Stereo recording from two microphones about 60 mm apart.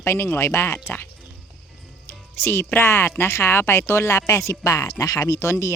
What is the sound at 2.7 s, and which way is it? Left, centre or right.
Speech, left.